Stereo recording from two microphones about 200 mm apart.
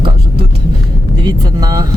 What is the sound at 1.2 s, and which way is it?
Speech, 20° right (ahead or behind).